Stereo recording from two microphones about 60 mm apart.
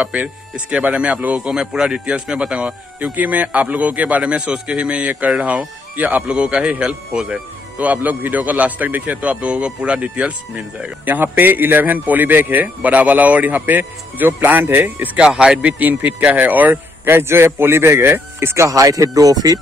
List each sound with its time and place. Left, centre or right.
0.0 s speech: centre
6.2 s a man's voice: centre
7.8 s speech: right
11.1 s speech: right
15.1 s a man's voice: centre
15.8 s speech: right
17.1 s a man's voice: right
18.7 s speech: right